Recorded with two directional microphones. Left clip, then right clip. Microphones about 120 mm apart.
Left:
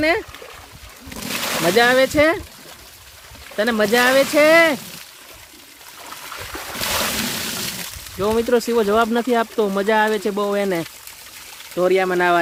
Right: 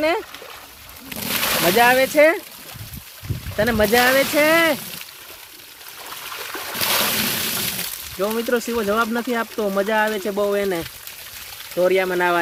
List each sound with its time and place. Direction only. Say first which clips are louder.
1.3 s a sound: right 2 dB; 55° right (ahead or behind)
1.7 s speech: left 1 dB; 30° left (ahead or behind)
3.6 s speech: even; 35° left (ahead or behind)
6.1 s boat: right 1 dB; 40° right (ahead or behind)
6.8 s a sound: right 2 dB; 45° right (ahead or behind)
8.2 s speech: left 4 dB; 50° left (ahead or behind)
11.8 s speech: left 1 dB; 35° left (ahead or behind)